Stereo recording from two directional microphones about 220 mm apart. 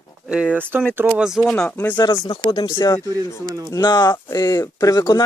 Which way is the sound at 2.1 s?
25° left (ahead or behind).